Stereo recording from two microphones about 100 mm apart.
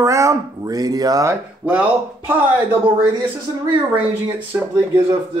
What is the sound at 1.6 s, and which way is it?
Speech, 10° right (ahead or behind).